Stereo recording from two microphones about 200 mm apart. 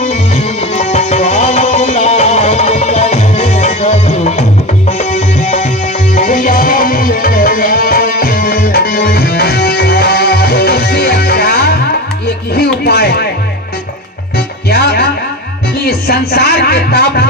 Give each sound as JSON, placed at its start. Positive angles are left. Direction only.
{"t": 0.7, "sound": "music", "side_deg": 35}
{"t": 14.3, "sound": "music", "side_deg": 55}
{"t": 16.0, "sound": "music", "side_deg": 50}